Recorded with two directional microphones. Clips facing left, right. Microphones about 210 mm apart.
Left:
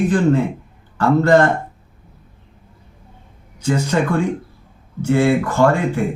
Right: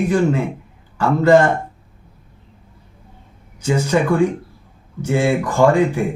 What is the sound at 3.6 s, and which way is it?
Speech, 10° right (ahead or behind).